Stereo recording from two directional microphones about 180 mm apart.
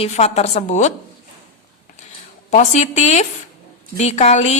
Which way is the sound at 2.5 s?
40° left (ahead or behind).